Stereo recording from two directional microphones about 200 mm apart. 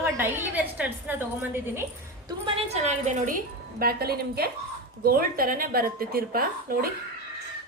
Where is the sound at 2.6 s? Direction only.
40° right (ahead or behind).